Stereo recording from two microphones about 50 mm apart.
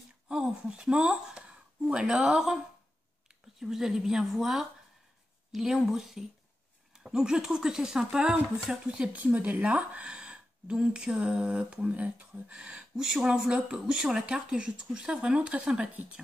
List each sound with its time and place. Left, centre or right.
0.3 s speech: centre
9.1 s speech: right